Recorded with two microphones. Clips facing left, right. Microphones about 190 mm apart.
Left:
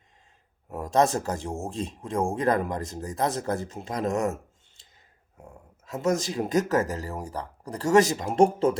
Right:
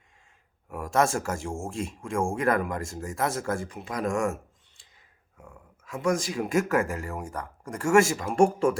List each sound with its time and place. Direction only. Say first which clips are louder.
0.7 s speech: left 2 dB; 20° left (ahead or behind)
5.4 s a sound: left 2 dB; 25° left (ahead or behind)
6.7 s speech: left 1 dB; 40° left (ahead or behind)
7.9 s speech: left 1 dB; 20° left (ahead or behind)